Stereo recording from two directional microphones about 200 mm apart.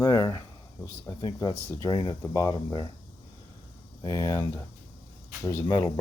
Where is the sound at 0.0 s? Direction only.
15° left (ahead or behind).